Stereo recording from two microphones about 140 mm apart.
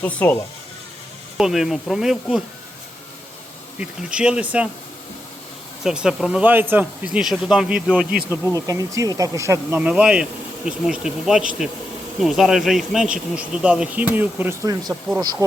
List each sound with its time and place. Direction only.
0.0 s speech: 10° left (ahead or behind)
1.4 s speech: 5° right (ahead or behind)
3.8 s speech: 5° right (ahead or behind)
5.8 s speech: 5° right (ahead or behind)
8.5 s speech: 25° right (ahead or behind)
9.8 s speech: 10° right (ahead or behind)
15.2 s speech: 30° right (ahead or behind)